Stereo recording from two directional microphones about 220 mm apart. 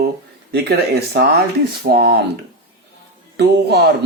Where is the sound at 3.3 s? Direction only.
45° right (ahead or behind).